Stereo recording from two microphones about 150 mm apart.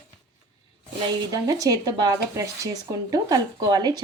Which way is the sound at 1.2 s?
25° right (ahead or behind).